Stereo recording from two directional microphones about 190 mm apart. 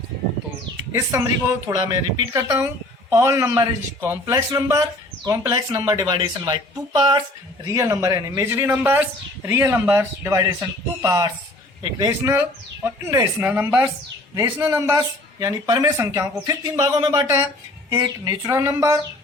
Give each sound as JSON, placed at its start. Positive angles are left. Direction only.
{"t": 0.9, "sound": "speech", "side_deg": -15}
{"t": 7.6, "sound": "speech", "side_deg": -15}